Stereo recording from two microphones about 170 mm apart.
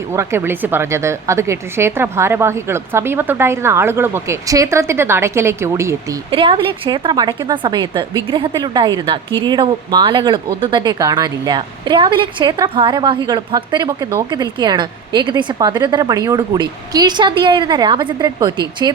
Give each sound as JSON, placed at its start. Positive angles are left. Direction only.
{"t": 0.1, "sound": "a woman's voice", "side_deg": -15}
{"t": 6.3, "sound": "speech", "side_deg": -30}